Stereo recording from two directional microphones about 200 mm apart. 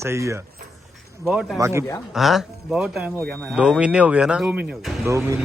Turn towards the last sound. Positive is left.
turn(degrees=-15)  # may be behind; listen again after turning